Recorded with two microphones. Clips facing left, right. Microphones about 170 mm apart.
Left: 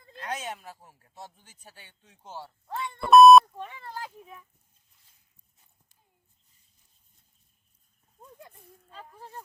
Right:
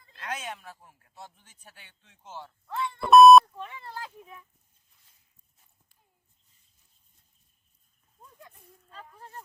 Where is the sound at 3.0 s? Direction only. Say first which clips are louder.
Even; centre (ahead or behind).